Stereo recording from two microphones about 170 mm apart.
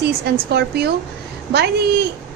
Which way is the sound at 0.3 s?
70° right (ahead or behind).